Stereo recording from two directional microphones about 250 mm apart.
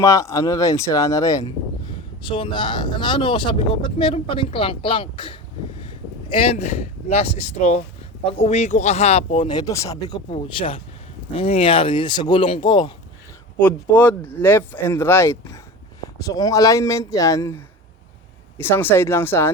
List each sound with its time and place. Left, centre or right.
0.0 s speech: centre
13.6 s speech: centre